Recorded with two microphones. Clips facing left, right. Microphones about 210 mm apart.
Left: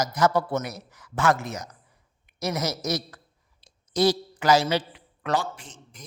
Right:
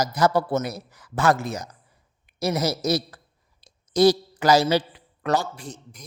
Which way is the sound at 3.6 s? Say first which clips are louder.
Right 5 dB; 40° right (ahead or behind).